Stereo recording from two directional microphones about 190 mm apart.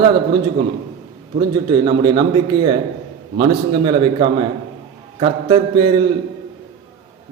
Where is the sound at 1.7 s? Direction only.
25° right (ahead or behind).